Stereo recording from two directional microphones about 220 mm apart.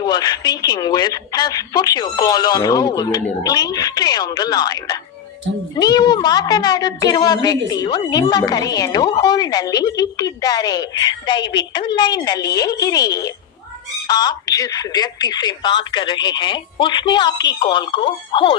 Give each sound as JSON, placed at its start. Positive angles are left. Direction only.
{"t": 0.0, "sound": "a woman's voice", "side_deg": 20}